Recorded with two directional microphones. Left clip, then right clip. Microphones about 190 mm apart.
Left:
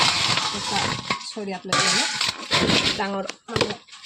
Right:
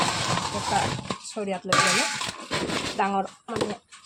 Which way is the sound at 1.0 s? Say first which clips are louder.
Left 3 dB; 5° right (ahead or behind).